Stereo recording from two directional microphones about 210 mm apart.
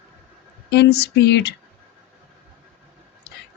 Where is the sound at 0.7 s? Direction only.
55° left (ahead or behind).